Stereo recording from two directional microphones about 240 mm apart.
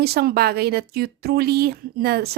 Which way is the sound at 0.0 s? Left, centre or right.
Right.